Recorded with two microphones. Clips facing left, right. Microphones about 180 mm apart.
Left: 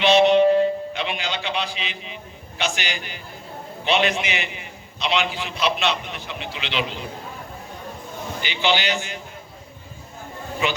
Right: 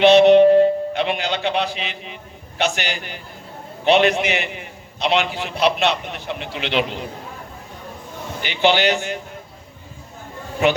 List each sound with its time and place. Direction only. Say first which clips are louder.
0.0 s a man's voice: right 5 dB; 60° right (ahead or behind)
8.4 s a man's voice: right 6 dB; 60° right (ahead or behind)